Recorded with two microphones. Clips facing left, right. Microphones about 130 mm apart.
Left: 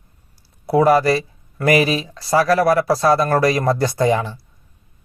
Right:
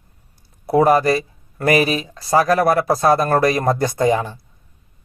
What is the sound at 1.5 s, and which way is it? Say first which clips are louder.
Speech: even; 30° right (ahead or behind).